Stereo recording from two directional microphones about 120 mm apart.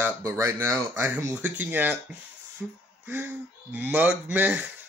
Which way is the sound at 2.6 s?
Centre (ahead or behind).